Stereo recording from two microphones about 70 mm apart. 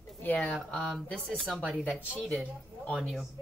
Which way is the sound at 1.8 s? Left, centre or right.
Left.